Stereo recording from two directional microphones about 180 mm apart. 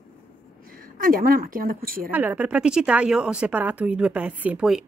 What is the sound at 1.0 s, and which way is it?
Speech, 50° right (ahead or behind).